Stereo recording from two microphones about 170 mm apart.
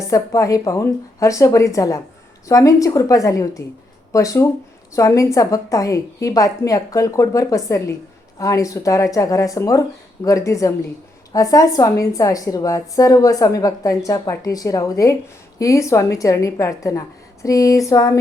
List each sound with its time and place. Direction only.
0.1 s a woman's voice: 20° left (ahead or behind)